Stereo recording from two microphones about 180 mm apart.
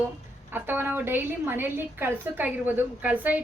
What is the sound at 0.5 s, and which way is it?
A woman's voice, 10° right (ahead or behind).